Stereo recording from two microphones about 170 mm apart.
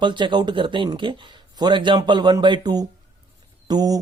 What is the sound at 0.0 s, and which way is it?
Speech, 25° right (ahead or behind).